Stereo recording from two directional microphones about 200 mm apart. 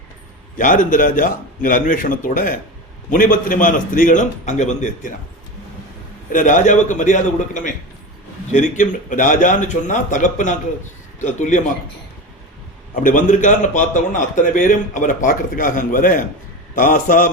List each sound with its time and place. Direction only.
0.5 s a man's voice: 40° left (ahead or behind)
6.3 s a man's voice: 40° left (ahead or behind)
13.0 s a man's voice: 40° left (ahead or behind)